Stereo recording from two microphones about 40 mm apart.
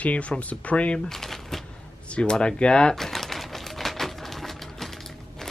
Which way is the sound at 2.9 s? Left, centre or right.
Centre.